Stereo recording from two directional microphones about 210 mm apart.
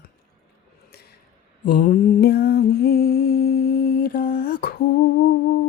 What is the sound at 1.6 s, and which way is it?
Lullaby, 40° left (ahead or behind).